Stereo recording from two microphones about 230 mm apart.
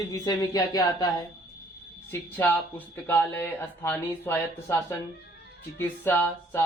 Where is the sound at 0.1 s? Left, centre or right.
Centre.